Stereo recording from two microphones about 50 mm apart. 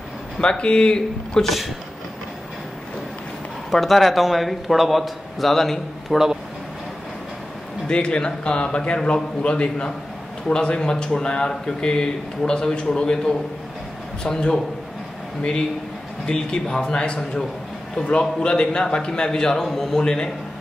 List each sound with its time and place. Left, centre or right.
0.4 s a man's voice: centre
1.4 s a man's voice: centre
3.7 s a man's voice: centre
7.9 s a man's voice: centre
16.3 s speech: centre
18.4 s speech: centre